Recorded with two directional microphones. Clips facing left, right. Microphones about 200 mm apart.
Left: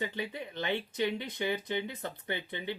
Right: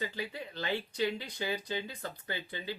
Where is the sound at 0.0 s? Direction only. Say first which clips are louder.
Left 2 dB; 20° left (ahead or behind).